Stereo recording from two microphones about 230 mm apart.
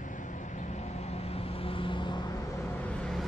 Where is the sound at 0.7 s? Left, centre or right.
Left.